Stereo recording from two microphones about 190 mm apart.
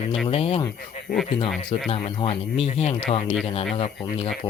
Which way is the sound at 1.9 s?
30° left (ahead or behind).